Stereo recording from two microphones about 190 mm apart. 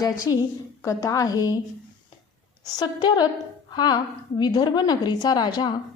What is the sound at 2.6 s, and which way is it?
A woman's voice, 20° left (ahead or behind).